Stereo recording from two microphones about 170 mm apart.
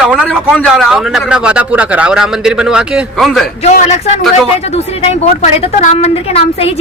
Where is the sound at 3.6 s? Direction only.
40° left (ahead or behind).